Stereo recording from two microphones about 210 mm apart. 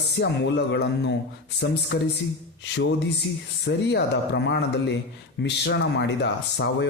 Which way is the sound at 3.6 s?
55° left (ahead or behind).